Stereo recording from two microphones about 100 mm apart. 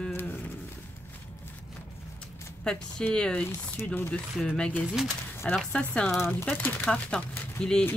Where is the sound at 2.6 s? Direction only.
10° left (ahead or behind).